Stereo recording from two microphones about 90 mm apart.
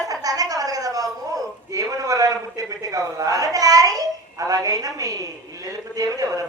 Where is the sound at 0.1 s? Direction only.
45° right (ahead or behind).